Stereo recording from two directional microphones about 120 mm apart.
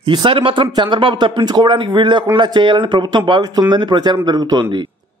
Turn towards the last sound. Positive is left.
turn(degrees=-35)  # may be behind; listen again after turning